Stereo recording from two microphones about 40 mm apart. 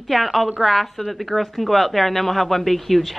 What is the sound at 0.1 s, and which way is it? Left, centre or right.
A woman's voice, centre.